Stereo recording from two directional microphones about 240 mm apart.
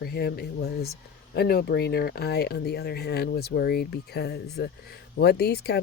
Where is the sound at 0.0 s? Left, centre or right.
Left.